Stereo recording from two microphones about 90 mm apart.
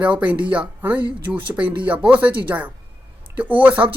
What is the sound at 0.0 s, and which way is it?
Speech, 15° right (ahead or behind).